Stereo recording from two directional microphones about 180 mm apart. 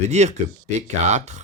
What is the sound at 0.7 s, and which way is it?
Speech, 40° right (ahead or behind).